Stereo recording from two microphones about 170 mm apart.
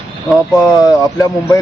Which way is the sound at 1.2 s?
20° left (ahead or behind).